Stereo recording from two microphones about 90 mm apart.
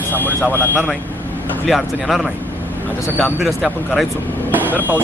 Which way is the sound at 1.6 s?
Centre (ahead or behind).